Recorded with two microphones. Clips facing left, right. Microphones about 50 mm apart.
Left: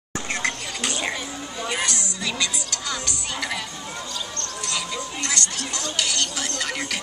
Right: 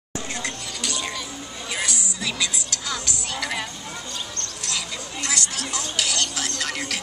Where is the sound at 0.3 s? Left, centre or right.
Left.